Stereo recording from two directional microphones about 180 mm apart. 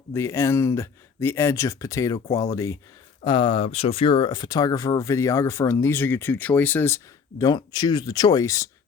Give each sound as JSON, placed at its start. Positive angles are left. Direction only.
{"t": 0.1, "sound": "speech", "side_deg": 15}